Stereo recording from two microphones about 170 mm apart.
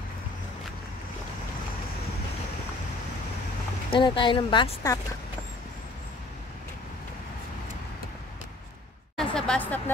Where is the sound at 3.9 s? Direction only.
30° left (ahead or behind).